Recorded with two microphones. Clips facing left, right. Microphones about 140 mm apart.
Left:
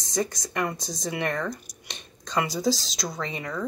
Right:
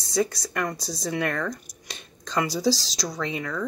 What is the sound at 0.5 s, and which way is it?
Speech, 10° left (ahead or behind).